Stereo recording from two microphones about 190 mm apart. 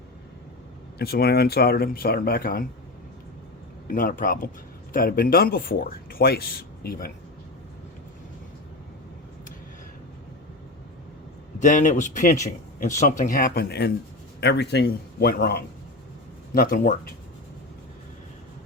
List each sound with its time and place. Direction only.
0.9 s speech: 55° left (ahead or behind)
3.8 s speech: 45° left (ahead or behind)
11.6 s speech: 40° left (ahead or behind)